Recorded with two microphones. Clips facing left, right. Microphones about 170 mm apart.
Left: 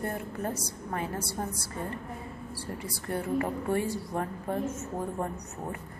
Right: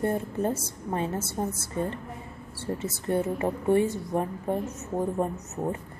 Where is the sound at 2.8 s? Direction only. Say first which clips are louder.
Right 7 dB; 25° right (ahead or behind).